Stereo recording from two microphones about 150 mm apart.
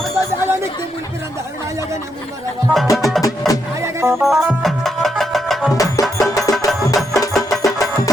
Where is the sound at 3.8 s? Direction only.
20° right (ahead or behind).